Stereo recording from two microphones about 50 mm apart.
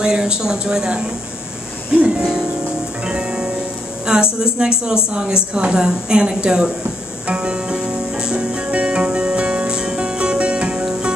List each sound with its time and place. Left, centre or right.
0.0 s a woman's voice: centre
1.9 s music: right
4.0 s a woman's voice: centre
7.2 s music: right